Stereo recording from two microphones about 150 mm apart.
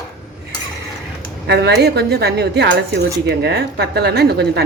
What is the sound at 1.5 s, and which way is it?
A woman's voice, 90° right.